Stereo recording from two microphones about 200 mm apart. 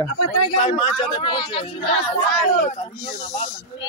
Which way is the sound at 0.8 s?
25° left (ahead or behind).